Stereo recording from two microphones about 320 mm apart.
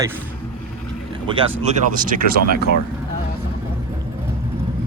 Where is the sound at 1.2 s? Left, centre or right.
Centre.